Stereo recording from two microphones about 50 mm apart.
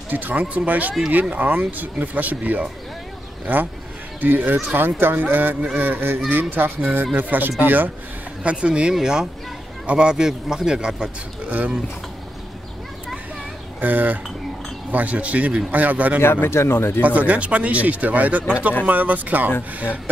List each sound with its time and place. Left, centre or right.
0.1 s speech: right
0.4 s speech: right
8.5 s a man's voice: right
11.4 s speech: right
13.7 s a man's voice: right
16.2 s speech: left
17.0 s a man's voice: right